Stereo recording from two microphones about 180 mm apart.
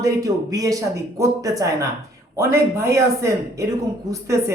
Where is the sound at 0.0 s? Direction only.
20° right (ahead or behind).